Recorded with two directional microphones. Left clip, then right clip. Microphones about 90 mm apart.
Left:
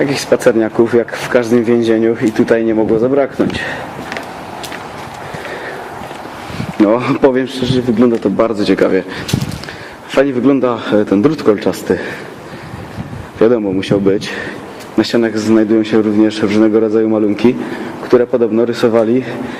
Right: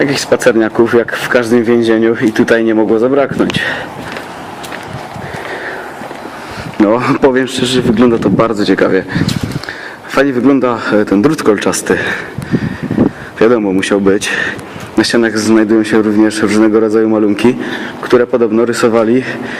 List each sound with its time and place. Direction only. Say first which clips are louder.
0.0 s speech: right 1 dB; 30° right (ahead or behind)
6.8 s a man's voice: right 1 dB; 30° right (ahead or behind)
8.7 s speech: right 2 dB; 20° right (ahead or behind)
10.2 s a man's voice: right 1 dB; 30° right (ahead or behind)
13.4 s a man's voice: right 2 dB; 40° right (ahead or behind)